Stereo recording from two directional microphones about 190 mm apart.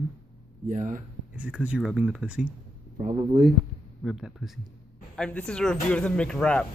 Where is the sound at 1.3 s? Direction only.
5° right (ahead or behind).